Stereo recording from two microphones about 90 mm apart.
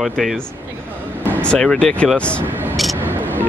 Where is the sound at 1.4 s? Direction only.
10° left (ahead or behind).